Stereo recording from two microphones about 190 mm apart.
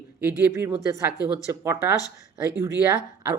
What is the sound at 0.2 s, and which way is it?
Speech, 10° right (ahead or behind).